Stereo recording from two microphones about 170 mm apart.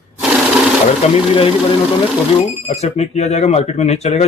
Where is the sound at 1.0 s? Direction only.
40° left (ahead or behind).